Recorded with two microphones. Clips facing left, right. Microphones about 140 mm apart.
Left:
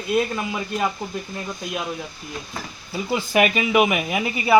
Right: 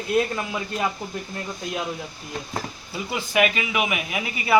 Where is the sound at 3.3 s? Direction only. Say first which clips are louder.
Left 3 dB; 40° left (ahead or behind).